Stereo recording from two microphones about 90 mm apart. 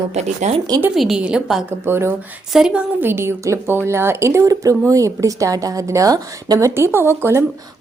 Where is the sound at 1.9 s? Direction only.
30° right (ahead or behind).